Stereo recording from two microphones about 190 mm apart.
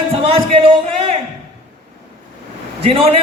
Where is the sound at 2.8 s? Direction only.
30° right (ahead or behind).